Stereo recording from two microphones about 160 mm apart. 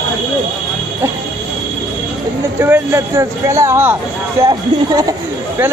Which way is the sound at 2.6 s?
15° right (ahead or behind).